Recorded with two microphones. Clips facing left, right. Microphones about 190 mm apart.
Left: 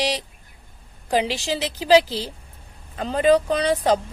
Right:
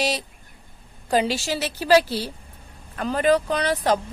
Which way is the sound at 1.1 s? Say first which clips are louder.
Even; 15° left (ahead or behind).